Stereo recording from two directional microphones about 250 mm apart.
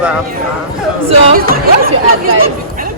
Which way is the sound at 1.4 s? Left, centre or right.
Right.